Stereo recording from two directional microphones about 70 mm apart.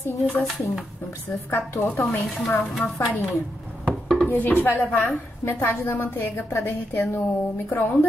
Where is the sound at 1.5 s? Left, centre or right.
Left.